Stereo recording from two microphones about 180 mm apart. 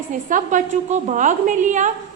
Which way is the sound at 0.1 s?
45° right (ahead or behind).